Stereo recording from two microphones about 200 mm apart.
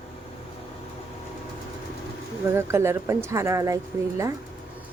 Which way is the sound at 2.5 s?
15° right (ahead or behind).